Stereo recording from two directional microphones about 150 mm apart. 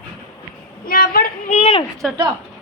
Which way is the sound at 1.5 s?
45° left (ahead or behind).